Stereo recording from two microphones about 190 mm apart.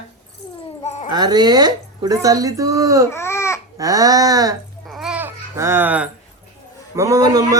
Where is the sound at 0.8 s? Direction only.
35° left (ahead or behind).